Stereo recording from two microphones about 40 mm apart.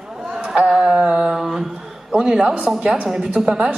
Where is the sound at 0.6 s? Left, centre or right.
Centre.